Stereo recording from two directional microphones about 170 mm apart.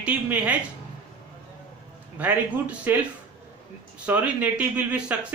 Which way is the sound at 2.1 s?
10° right (ahead or behind).